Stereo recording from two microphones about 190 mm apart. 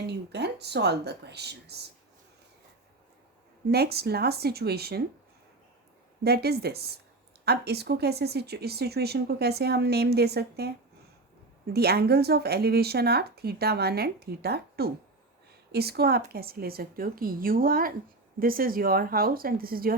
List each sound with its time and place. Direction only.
0.1 s speech: 65° right (ahead or behind)
3.7 s speech: 55° right (ahead or behind)
6.2 s speech: 55° right (ahead or behind)
11.7 s speech: 55° right (ahead or behind)